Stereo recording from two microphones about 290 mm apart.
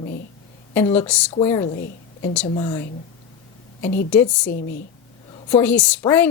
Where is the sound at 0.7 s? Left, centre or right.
Centre.